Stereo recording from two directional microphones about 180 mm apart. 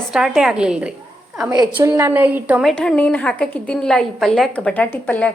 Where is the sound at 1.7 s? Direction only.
10° right (ahead or behind).